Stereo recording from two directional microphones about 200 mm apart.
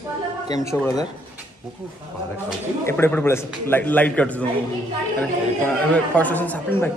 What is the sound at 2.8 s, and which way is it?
Speech, 10° left (ahead or behind).